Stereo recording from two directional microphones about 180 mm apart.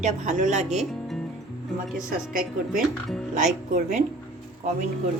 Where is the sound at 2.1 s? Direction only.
50° right (ahead or behind).